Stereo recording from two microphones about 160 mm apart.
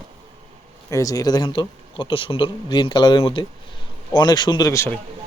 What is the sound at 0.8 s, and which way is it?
A man's voice, 20° left (ahead or behind).